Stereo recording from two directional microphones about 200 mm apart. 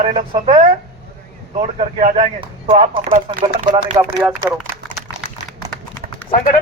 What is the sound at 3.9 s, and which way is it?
Speech, 20° right (ahead or behind).